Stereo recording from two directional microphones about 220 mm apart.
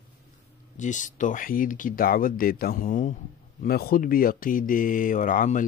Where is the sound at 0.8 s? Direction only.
35° left (ahead or behind).